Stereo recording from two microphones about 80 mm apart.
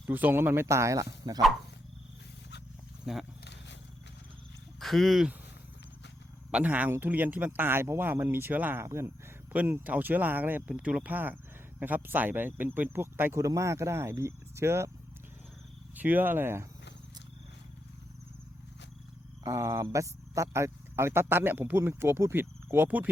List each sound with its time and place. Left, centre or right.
0.0 s speech: right
1.2 s speech: right
3.1 s speech: centre
4.8 s speech: centre
6.5 s speech: centre; by 9.1 s right
9.5 s speech: centre
13.4 s speech: right
16.0 s speech: right
19.5 s speech: right